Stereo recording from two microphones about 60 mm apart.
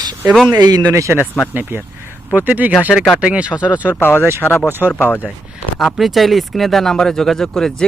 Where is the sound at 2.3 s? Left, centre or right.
Right.